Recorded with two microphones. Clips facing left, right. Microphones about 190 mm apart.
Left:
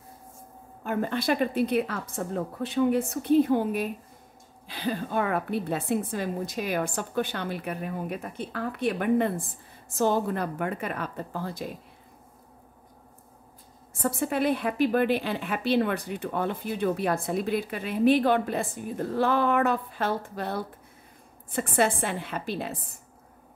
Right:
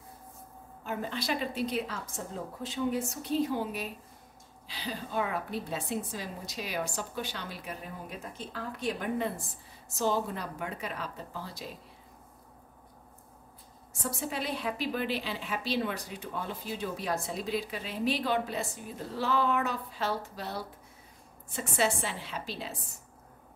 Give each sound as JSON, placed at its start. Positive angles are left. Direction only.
{"t": 0.8, "sound": "a woman's voice", "side_deg": 55}
{"t": 14.0, "sound": "a woman's voice", "side_deg": 55}